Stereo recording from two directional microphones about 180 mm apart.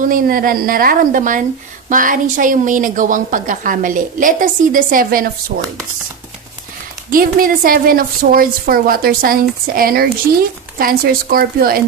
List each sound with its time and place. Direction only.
0.0 s a woman's voice: 50° right (ahead or behind)
7.1 s a woman's voice: 50° right (ahead or behind)